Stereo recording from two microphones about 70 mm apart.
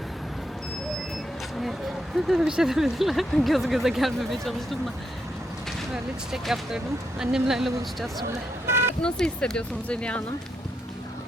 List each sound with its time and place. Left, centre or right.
2.1 s speech: centre
5.9 s speech: centre
8.3 s a sound: right
9.0 s speech: centre